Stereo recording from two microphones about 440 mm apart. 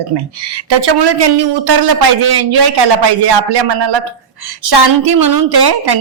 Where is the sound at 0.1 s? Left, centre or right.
Right.